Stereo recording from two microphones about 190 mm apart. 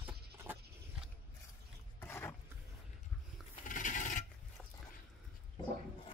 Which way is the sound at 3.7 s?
45° left (ahead or behind).